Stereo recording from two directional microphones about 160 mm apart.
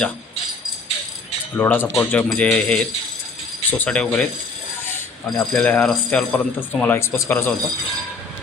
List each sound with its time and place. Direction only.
1.5 s speech: 10° left (ahead or behind)
4.9 s a sound: 15° left (ahead or behind)
5.5 s speech: 5° left (ahead or behind)